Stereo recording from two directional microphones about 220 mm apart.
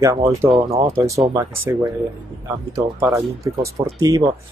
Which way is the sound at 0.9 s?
15° right (ahead or behind).